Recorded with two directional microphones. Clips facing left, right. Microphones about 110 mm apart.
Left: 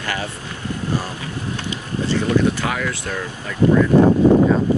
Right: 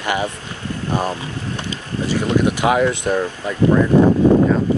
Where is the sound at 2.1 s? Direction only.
20° right (ahead or behind).